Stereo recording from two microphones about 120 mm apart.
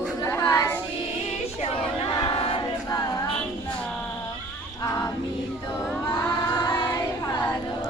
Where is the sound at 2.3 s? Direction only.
50° left (ahead or behind).